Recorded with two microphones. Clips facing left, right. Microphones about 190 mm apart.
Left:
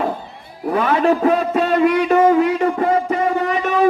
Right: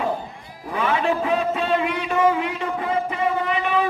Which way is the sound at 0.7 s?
40° left (ahead or behind).